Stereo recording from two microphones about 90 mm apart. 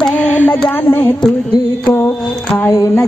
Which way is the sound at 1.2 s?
55° left (ahead or behind).